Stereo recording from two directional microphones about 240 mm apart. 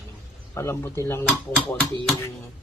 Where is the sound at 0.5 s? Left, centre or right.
Centre.